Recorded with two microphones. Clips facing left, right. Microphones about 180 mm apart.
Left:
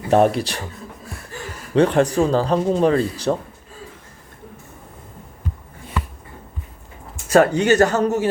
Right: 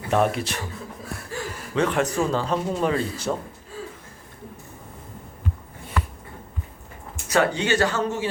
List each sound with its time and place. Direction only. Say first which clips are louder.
0.1 s speech: left 6 dB; 35° left (ahead or behind)
1.7 s speech: left 7 dB; 35° left (ahead or behind)
7.3 s speech: left 7 dB; 45° left (ahead or behind)